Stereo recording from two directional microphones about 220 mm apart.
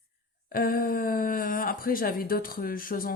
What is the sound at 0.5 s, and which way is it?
Speech, 40° left (ahead or behind).